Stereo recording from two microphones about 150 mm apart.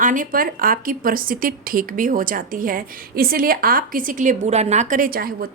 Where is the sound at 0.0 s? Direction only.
60° right (ahead or behind).